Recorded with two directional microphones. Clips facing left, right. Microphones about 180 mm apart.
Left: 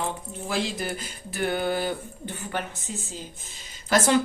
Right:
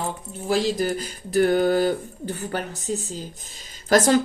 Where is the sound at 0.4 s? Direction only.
40° right (ahead or behind).